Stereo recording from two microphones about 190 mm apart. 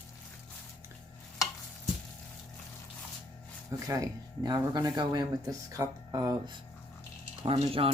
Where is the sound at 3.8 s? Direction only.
15° right (ahead or behind).